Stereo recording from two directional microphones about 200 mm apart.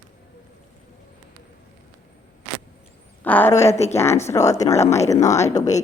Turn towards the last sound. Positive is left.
turn(degrees=15)  # may be behind; listen again after turning